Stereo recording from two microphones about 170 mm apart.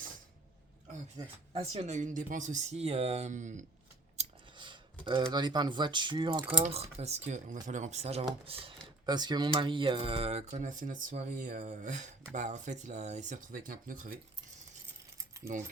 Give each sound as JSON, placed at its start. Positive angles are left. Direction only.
{"t": 1.2, "sound": "speech", "side_deg": -25}
{"t": 1.5, "sound": "speech", "side_deg": -35}
{"t": 4.2, "sound": "speech", "side_deg": -30}
{"t": 6.6, "sound": "speech", "side_deg": -40}